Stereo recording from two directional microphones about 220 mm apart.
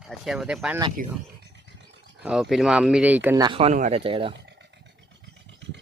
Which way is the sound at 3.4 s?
25° right (ahead or behind).